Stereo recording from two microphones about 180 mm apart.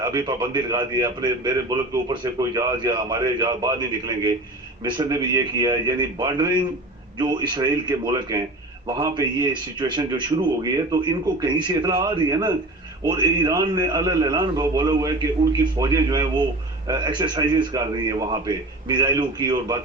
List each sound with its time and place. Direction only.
0.0 s a man's voice: 20° right (ahead or behind)